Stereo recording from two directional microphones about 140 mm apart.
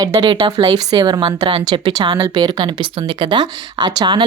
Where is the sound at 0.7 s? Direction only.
30° right (ahead or behind).